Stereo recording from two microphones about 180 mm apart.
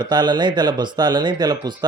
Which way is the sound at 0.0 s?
25° right (ahead or behind).